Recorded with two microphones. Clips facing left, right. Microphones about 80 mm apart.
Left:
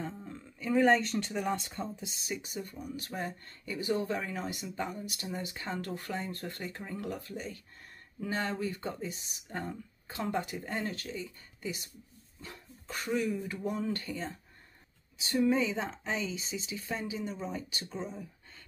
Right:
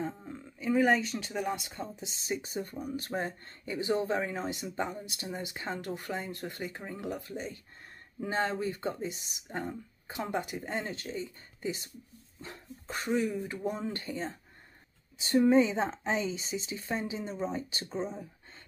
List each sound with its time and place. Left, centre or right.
0.0 s speech: centre
2.0 s speech: right
15.1 s speech: right